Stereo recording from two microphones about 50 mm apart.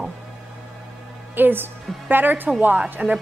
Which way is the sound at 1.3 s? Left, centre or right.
Right.